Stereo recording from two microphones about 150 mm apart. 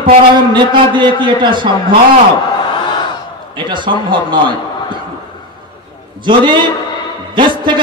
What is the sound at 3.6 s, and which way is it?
Speech, 30° right (ahead or behind).